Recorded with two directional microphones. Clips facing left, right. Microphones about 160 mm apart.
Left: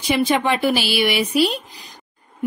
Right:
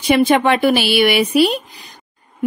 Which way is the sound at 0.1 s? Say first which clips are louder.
Right 5 dB; 60° right (ahead or behind).